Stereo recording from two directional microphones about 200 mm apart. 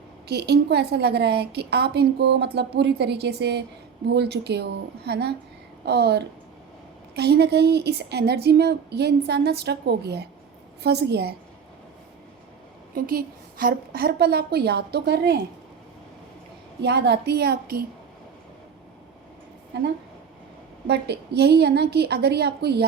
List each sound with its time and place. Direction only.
0.3 s a woman's voice: 55° right (ahead or behind)
13.0 s a woman's voice: 45° right (ahead or behind)
16.8 s a woman's voice: 60° right (ahead or behind)
19.7 s a woman's voice: 60° right (ahead or behind)